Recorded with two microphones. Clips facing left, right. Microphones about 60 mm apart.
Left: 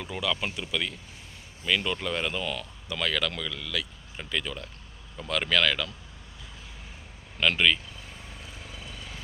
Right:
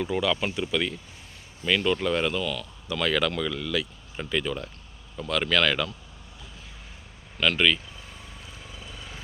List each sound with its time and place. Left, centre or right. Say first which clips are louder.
0.0 s speech: right 5 dB; centre
1.6 s speech: right 4 dB; centre
2.3 s speech: right 3 dB; left
3.1 s speech: right 6 dB; centre
5.1 s speech: right 2 dB; centre
5.6 s speech: right 2 dB; centre
7.3 s speech: right 1 dB; centre
8.3 s vehicle: even; centre